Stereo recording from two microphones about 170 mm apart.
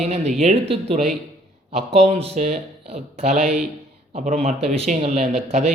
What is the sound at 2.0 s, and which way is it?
Speech, 40° right (ahead or behind).